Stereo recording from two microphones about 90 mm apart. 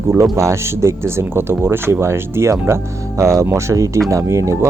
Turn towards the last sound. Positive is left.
turn(degrees=-30)  # may be behind; listen again after turning